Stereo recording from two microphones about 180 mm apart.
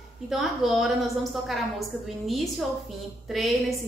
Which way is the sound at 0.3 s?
Centre (ahead or behind).